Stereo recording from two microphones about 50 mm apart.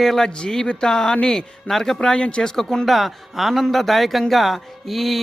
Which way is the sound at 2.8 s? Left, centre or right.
Centre.